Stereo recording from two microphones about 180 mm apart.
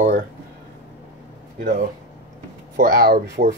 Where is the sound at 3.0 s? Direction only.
50° right (ahead or behind).